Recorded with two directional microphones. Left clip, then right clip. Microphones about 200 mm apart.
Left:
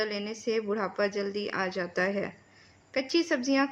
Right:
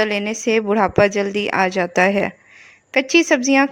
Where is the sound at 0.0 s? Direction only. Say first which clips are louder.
Right 12 dB; 45° right (ahead or behind).